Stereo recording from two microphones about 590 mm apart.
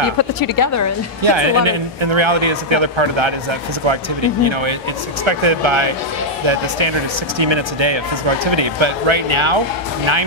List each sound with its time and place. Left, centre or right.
0.2 s a woman's voice: left
1.2 s a man's voice: right